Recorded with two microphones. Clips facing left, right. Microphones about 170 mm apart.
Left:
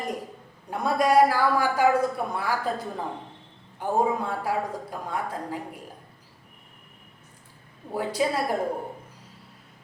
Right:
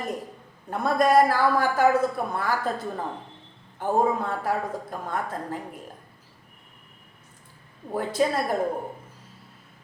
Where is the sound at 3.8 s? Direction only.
10° left (ahead or behind).